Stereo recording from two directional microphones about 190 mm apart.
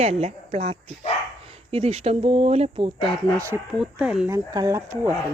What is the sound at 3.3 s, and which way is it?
Speech, 15° right (ahead or behind).